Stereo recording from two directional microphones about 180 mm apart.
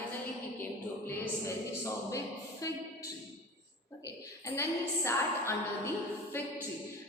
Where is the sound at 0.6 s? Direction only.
10° left (ahead or behind).